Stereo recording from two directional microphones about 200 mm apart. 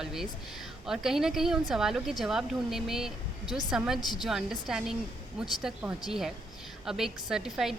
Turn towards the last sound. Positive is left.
turn(degrees=-5)  # may be behind; listen again after turning